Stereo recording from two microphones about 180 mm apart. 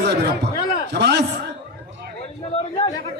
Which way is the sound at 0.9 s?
70° right (ahead or behind).